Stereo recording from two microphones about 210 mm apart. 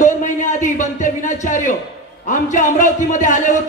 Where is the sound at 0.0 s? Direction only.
35° left (ahead or behind).